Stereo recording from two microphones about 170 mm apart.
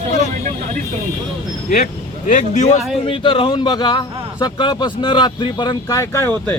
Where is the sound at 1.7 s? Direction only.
45° left (ahead or behind).